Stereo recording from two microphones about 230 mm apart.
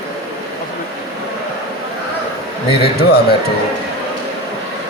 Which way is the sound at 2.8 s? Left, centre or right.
Left.